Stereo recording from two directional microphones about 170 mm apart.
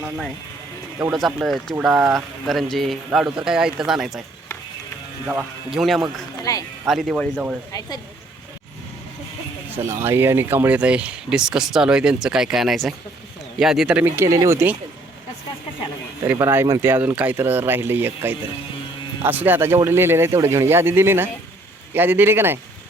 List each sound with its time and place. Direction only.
1.1 s speech: centre (ahead or behind)
5.2 s speech: 10° right (ahead or behind)
6.4 s music: 20° left (ahead or behind)
6.8 s speech: centre (ahead or behind)
7.7 s a woman's voice: 20° left (ahead or behind)
9.7 s speech: 15° right (ahead or behind)
16.2 s speech: 15° right (ahead or behind)